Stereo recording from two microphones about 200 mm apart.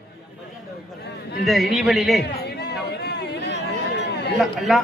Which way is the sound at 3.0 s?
55° left (ahead or behind).